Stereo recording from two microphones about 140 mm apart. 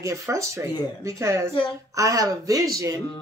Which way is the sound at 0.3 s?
20° right (ahead or behind).